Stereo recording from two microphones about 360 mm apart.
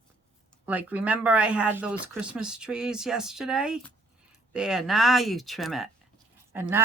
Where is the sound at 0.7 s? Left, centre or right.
Centre.